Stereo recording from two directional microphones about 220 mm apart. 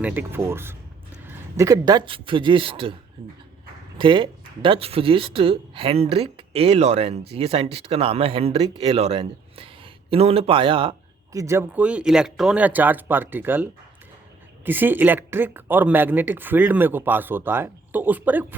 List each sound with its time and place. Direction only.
0.0 s speech: 10° right (ahead or behind)